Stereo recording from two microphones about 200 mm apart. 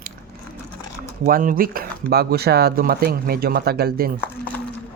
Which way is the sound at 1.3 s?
45° right (ahead or behind).